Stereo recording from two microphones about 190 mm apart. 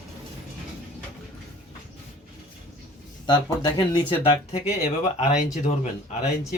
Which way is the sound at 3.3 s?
25° left (ahead or behind).